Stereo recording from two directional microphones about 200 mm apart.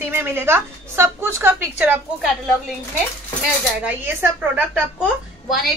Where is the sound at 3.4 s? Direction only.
10° right (ahead or behind).